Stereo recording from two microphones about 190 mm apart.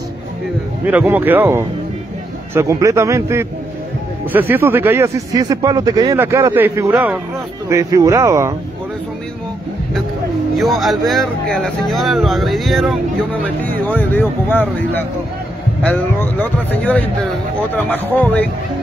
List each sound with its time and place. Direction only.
0.8 s speech: 10° right (ahead or behind)
10.5 s speech: centre (ahead or behind)